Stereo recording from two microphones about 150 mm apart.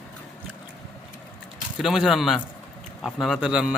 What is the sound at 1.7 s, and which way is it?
A man's voice, centre (ahead or behind).